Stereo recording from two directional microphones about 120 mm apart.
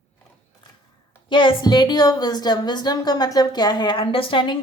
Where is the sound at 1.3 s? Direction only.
40° left (ahead or behind).